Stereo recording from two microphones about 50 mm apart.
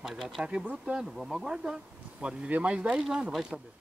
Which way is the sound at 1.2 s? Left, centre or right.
Centre.